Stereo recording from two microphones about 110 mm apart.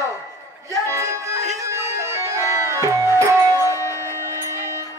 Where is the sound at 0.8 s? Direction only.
25° right (ahead or behind).